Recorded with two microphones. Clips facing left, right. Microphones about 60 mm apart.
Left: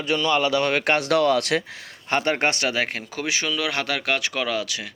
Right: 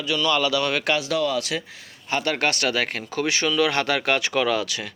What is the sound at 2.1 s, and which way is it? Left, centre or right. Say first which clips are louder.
Speech: left 2 dB; left.